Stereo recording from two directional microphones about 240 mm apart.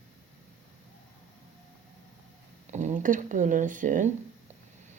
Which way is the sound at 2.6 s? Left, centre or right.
Right.